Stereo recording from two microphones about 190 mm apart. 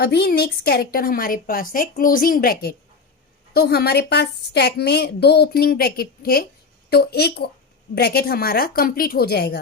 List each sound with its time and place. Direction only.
0.0 s a woman's voice: 55° left (ahead or behind)